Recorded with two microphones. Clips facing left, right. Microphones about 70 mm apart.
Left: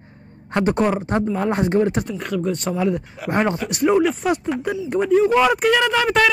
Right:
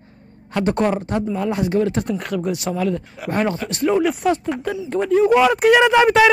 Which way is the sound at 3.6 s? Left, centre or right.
Centre.